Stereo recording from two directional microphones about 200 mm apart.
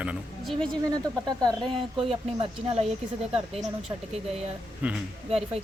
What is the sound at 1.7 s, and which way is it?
Speech, 25° right (ahead or behind).